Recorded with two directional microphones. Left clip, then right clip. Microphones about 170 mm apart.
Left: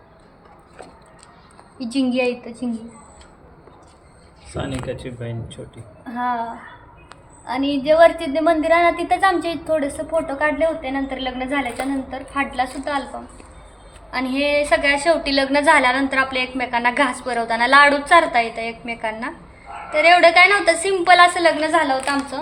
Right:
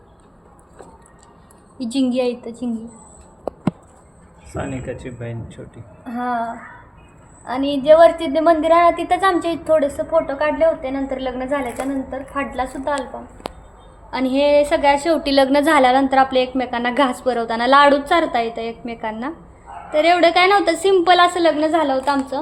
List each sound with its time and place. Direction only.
1.8 s a woman's voice: 60° right (ahead or behind)
4.5 s speech: 10° left (ahead or behind)
6.1 s a woman's voice: 60° right (ahead or behind)
14.1 s a woman's voice: 90° right; by 22.2 s 65° right (ahead or behind)